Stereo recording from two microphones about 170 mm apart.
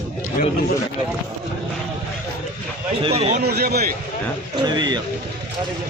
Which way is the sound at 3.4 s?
70° right (ahead or behind).